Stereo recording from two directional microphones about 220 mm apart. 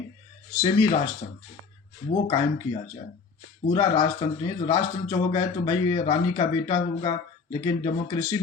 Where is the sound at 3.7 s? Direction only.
25° left (ahead or behind).